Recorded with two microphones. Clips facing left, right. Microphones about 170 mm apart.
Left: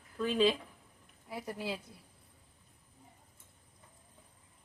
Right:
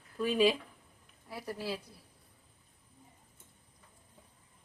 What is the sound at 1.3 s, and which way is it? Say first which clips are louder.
Speech: even; 20° left (ahead or behind).